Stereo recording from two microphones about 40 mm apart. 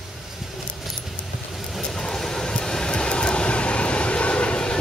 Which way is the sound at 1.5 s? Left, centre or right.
Centre.